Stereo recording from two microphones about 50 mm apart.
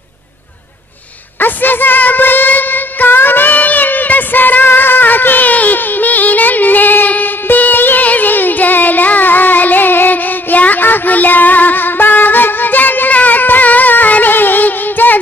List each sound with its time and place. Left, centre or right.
1.4 s music: left